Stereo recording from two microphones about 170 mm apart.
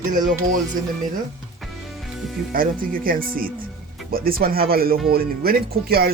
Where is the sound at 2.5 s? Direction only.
55° right (ahead or behind).